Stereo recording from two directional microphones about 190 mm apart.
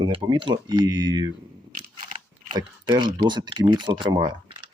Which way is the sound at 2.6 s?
25° right (ahead or behind).